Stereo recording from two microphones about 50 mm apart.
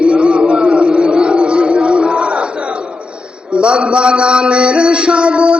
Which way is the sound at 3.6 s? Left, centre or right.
Right.